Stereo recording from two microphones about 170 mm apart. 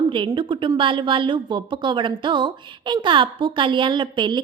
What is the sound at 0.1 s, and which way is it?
A woman's voice, 30° right (ahead or behind).